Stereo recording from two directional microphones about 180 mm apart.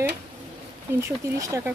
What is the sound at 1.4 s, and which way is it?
Speech, 15° right (ahead or behind).